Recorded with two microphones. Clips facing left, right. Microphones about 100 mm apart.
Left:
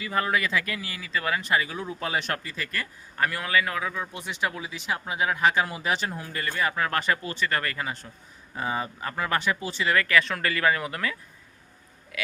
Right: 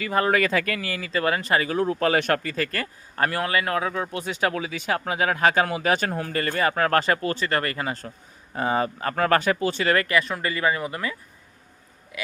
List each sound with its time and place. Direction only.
0.2 s speech: 50° right (ahead or behind)
4.1 s speech: 90° right
5.5 s speech: 50° right (ahead or behind)
7.3 s speech: 35° right (ahead or behind)
8.5 s speech: 55° right (ahead or behind)
10.2 s speech: 10° right (ahead or behind)